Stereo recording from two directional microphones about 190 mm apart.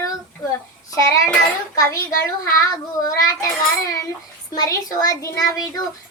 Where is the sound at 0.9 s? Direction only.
15° left (ahead or behind).